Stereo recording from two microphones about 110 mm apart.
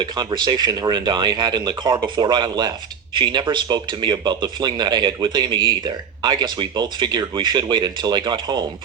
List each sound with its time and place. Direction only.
0.0 s speech: 45° right (ahead or behind)